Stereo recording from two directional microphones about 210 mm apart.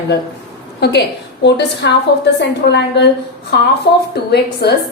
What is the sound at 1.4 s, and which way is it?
A woman's voice, 55° left (ahead or behind).